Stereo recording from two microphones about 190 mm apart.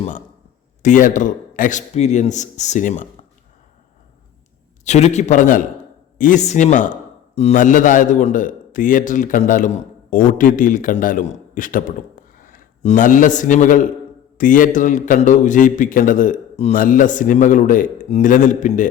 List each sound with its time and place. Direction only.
0.8 s a man's voice: 40° left (ahead or behind)
4.9 s a man's voice: 35° left (ahead or behind)